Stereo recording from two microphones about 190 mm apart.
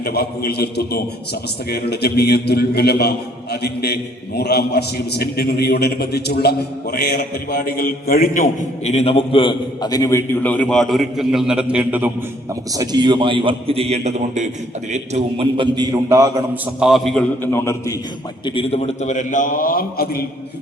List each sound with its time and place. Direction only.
0.0 s a man's voice: 55° left (ahead or behind); by 12.1 s 10° right (ahead or behind)
12.7 s a man's voice: 20° right (ahead or behind)
16.8 s a man's voice: centre (ahead or behind)
18.4 s a man's voice: 30° left (ahead or behind); by 20.2 s 50° left (ahead or behind)